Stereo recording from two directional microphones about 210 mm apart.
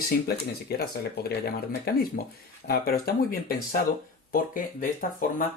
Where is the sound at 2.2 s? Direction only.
45° left (ahead or behind).